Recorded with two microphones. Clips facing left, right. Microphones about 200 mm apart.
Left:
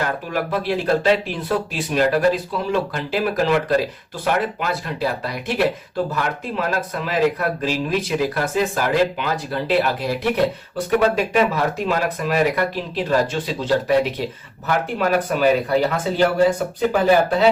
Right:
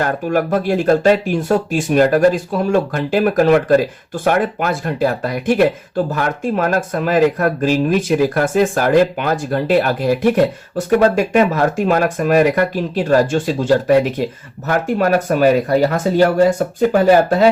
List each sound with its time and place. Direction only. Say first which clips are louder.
0.0 s speech: right 6 dB; 50° right (ahead or behind)